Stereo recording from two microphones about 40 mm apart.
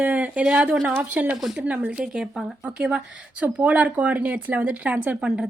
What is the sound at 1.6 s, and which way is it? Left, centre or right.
Speech, right.